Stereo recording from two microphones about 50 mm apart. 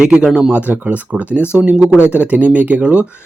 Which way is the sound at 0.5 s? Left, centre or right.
Right.